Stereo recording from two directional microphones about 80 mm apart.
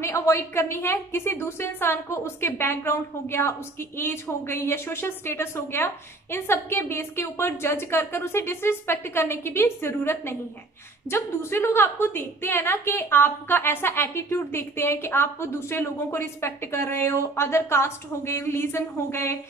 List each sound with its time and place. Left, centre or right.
0.0 s a woman's voice: left